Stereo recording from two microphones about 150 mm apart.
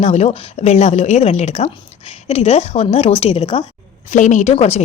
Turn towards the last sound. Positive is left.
turn(degrees=45)  # may be behind; listen again after turning